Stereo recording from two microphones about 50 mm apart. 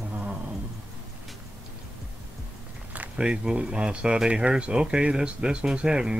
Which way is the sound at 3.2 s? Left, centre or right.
Centre.